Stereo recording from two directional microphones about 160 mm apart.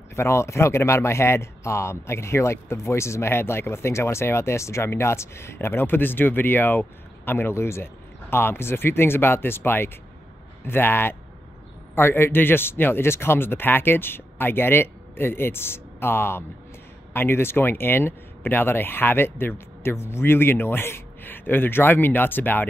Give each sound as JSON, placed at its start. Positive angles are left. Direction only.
{"t": 0.1, "sound": "a man's voice", "side_deg": 15}